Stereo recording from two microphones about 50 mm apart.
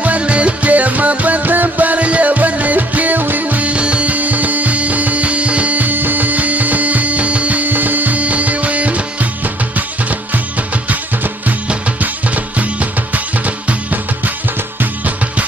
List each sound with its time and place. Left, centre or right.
0.0 s music: right
14.8 s music: right